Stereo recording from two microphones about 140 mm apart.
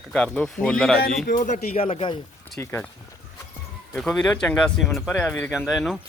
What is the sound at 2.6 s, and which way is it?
Speech, 20° left (ahead or behind).